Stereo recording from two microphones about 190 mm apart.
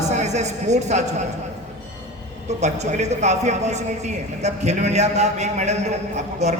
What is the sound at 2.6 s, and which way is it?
A man's voice, 35° right (ahead or behind).